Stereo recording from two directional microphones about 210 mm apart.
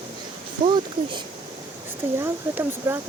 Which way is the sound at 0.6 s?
20° right (ahead or behind).